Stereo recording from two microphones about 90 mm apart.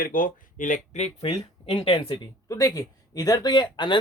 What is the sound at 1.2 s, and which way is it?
Speech, 90° left.